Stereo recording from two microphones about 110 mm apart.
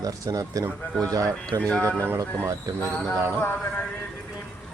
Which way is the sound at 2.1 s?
30° right (ahead or behind).